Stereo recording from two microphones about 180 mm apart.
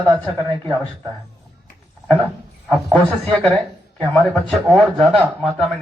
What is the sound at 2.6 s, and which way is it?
Speech, centre (ahead or behind).